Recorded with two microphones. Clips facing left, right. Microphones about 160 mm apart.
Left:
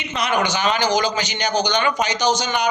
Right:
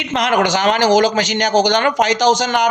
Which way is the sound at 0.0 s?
90° right.